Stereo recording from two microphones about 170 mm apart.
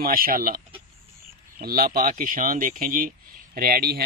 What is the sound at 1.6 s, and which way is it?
Speech, 60° right (ahead or behind).